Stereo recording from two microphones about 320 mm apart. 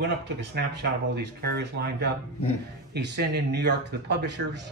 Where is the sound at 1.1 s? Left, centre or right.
Right.